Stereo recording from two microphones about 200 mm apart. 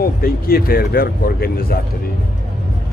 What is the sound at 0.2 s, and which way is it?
Speech, 45° left (ahead or behind).